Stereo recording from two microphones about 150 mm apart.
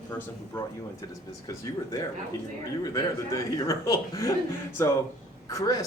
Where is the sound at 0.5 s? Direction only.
15° left (ahead or behind).